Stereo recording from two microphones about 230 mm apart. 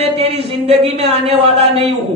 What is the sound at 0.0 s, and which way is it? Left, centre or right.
A woman's voice, right.